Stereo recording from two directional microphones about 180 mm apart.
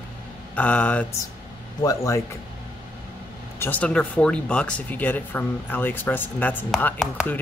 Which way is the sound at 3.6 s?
10° left (ahead or behind).